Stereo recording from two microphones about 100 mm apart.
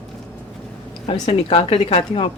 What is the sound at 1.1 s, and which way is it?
A woman's voice, 70° left (ahead or behind).